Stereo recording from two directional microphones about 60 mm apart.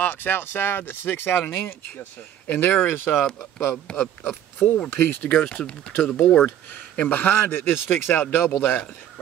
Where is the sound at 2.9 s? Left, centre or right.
Left.